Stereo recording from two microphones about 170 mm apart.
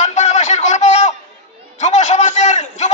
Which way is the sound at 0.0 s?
45° left (ahead or behind).